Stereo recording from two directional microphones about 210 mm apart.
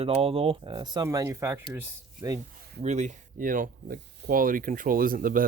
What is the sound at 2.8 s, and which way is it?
Speech, 35° right (ahead or behind).